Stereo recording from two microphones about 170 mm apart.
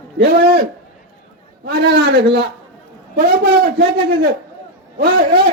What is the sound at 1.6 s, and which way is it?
Speech, 75° right (ahead or behind).